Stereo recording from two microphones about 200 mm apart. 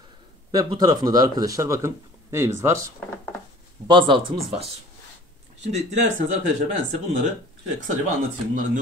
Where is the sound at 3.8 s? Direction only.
25° right (ahead or behind).